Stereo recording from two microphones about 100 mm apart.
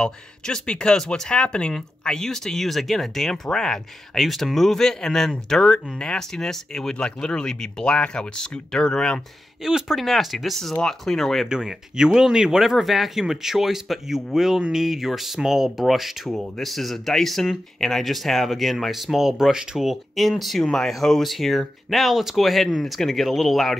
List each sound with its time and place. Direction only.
0.0 s speech: 10° left (ahead or behind)
9.6 s speech: 5° right (ahead or behind)
11.4 s speech: 5° right (ahead or behind)